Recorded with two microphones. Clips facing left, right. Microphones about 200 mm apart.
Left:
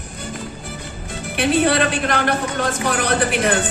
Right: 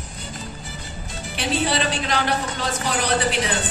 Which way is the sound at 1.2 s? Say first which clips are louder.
Left 7 dB; 55° left (ahead or behind).